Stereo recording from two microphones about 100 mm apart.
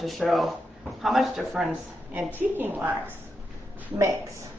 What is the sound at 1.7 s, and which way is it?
Speech, 15° right (ahead or behind).